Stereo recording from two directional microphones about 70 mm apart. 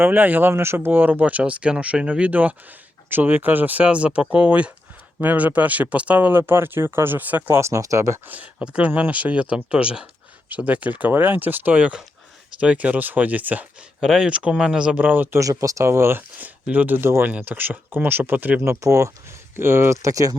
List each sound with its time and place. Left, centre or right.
0.0 s speech: right
7.6 s speech: right
8.5 s speech: centre
14.0 s speech: centre; by 15.4 s right
15.4 s speech: right
16.4 s speech: right
20.0 s speech: right